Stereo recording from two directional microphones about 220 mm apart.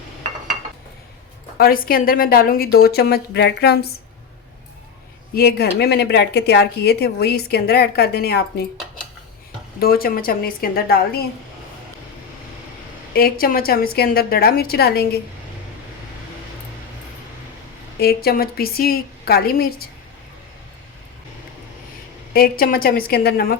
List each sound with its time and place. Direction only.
1.5 s a woman's voice: 40° left (ahead or behind)
5.3 s a woman's voice: 45° left (ahead or behind)
9.8 s a woman's voice: 45° left (ahead or behind)
13.1 s a woman's voice: 40° left (ahead or behind)
18.0 s a woman's voice: 45° left (ahead or behind)
22.3 s a woman's voice: 40° left (ahead or behind)